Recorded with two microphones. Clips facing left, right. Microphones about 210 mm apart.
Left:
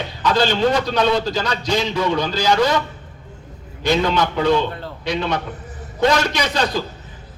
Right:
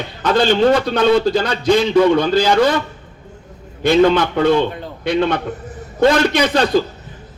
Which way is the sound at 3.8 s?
55° right (ahead or behind).